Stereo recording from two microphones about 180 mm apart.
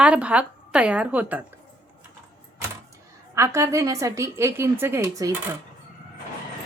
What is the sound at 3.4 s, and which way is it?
A woman's voice, 15° right (ahead or behind).